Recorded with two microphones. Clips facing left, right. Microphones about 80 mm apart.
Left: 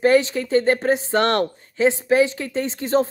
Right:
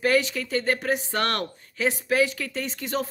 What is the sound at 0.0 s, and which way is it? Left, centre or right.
Speech, left.